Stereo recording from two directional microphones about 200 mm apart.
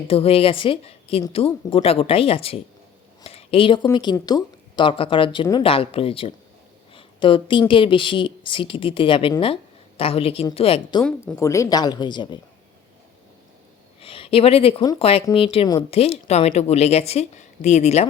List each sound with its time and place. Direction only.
0.1 s speech: 30° left (ahead or behind)
3.2 s a sound: 30° left (ahead or behind)
3.9 s speech: 20° left (ahead or behind)
6.9 s a sound: 25° left (ahead or behind)
7.7 s speech: 25° left (ahead or behind)
11.0 s speech: 10° left (ahead or behind)
14.0 s speech: 25° left (ahead or behind)